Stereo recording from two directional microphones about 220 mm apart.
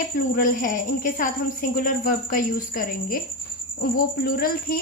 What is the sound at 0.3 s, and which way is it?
A woman's voice, 40° left (ahead or behind).